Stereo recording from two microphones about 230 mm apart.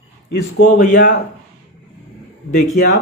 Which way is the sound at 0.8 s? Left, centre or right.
Left.